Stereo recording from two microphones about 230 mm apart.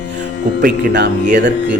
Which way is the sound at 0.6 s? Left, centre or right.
Right.